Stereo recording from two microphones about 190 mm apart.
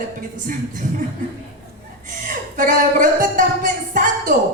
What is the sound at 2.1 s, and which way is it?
A woman's voice, 45° right (ahead or behind).